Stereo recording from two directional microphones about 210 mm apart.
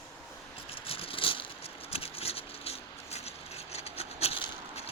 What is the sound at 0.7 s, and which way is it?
Patter, 25° left (ahead or behind).